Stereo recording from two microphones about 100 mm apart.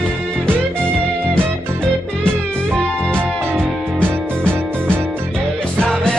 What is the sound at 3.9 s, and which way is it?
Music, 15° left (ahead or behind).